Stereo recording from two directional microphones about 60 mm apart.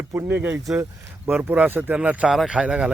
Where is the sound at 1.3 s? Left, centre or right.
Right.